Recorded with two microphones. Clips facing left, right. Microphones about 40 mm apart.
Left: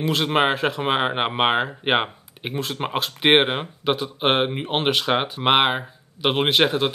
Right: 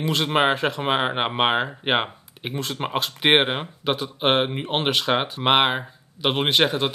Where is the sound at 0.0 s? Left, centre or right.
Centre.